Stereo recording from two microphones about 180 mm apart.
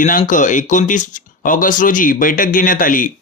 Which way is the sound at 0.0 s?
50° left (ahead or behind).